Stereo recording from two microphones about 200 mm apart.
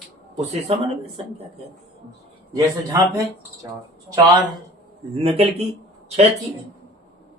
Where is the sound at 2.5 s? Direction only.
15° right (ahead or behind).